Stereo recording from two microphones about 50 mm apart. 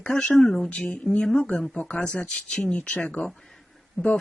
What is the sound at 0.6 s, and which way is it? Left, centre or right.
Speech, left.